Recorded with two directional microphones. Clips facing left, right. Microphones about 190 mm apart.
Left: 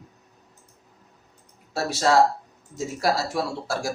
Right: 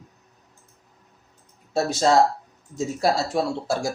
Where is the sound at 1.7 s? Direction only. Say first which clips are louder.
Right 1 dB; 20° right (ahead or behind).